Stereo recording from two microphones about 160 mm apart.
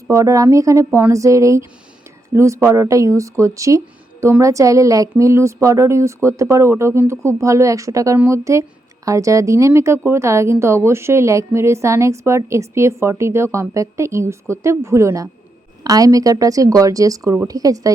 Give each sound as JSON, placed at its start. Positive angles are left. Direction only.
{"t": 0.1, "sound": "a woman's voice", "side_deg": -20}